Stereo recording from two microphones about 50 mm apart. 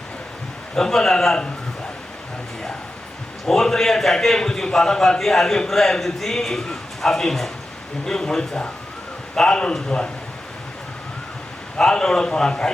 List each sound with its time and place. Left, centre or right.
0.8 s a man's voice: centre
3.4 s a man's voice: centre
11.8 s a man's voice: centre